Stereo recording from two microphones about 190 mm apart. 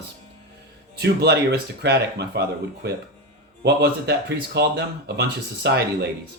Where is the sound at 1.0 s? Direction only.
60° right (ahead or behind).